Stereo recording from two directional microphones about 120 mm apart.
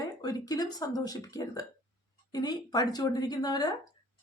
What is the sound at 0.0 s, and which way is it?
A woman's voice, 30° left (ahead or behind).